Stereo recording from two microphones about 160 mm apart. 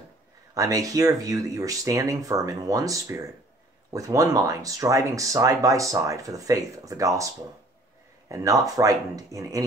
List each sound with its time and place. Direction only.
0.6 s speech: 20° right (ahead or behind)
8.3 s speech: 20° right (ahead or behind)